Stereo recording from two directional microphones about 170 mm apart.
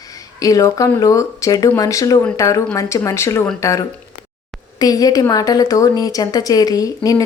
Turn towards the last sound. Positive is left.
turn(degrees=20)  # may be behind; listen again after turning